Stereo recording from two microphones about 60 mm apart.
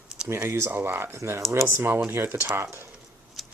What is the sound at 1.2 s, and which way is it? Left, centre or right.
Speech, right.